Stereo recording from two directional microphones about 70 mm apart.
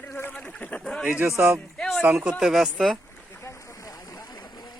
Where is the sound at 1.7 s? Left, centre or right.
Centre.